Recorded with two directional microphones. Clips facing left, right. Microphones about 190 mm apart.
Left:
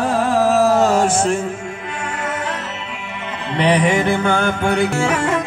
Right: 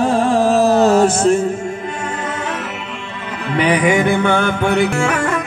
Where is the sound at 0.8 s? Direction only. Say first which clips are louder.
Right 3 dB; 40° right (ahead or behind).